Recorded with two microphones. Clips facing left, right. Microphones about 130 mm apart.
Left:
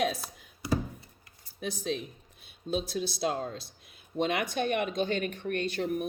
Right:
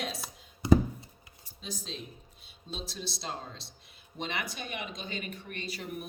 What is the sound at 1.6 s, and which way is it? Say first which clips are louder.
Speech: left 8 dB; 60° left (ahead or behind).